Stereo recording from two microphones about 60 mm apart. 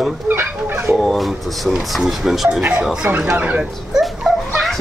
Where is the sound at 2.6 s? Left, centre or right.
Right.